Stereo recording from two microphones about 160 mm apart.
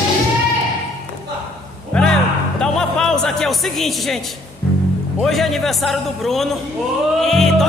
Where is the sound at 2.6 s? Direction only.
5° left (ahead or behind).